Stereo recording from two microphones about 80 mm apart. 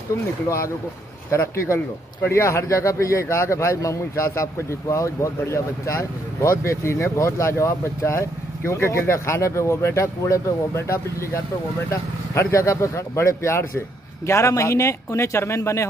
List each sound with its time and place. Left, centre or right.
1.3 s speech: left